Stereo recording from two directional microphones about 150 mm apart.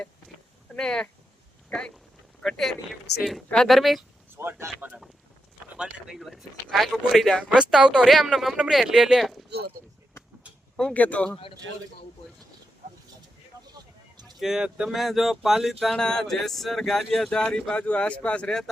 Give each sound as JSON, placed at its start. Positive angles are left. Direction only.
{"t": 0.8, "sound": "speech", "side_deg": 5}
{"t": 2.4, "sound": "speech", "side_deg": 0}
{"t": 4.4, "sound": "speech", "side_deg": -15}
{"t": 5.7, "sound": "speech", "side_deg": -5}
{"t": 9.5, "sound": "speech", "side_deg": -90}
{"t": 10.8, "sound": "speech", "side_deg": 5}
{"t": 14.3, "sound": "speech", "side_deg": 0}